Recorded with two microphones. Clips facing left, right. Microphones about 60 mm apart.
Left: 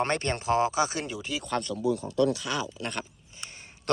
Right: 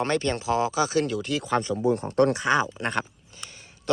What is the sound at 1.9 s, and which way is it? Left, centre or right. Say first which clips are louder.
Speech: right 4 dB; right.